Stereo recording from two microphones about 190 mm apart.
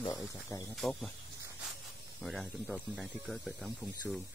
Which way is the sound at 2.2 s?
Centre (ahead or behind).